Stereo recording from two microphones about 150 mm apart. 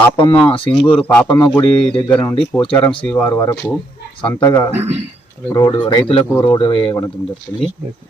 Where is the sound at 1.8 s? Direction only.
5° left (ahead or behind).